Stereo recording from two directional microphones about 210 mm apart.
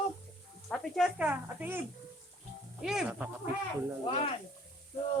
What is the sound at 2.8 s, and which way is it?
Speech, 5° right (ahead or behind).